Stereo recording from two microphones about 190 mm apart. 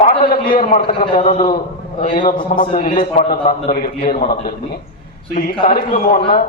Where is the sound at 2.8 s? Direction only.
50° left (ahead or behind).